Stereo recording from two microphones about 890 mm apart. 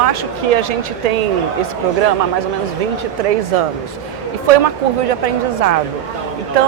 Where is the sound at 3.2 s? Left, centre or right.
Right.